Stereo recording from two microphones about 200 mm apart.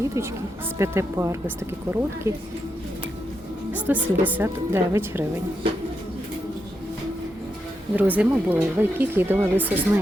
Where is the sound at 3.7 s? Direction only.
10° right (ahead or behind).